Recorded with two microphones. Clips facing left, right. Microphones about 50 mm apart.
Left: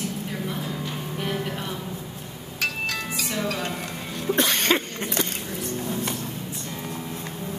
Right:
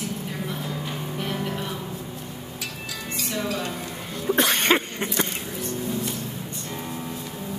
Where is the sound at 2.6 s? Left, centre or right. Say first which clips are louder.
Left 10 dB; left.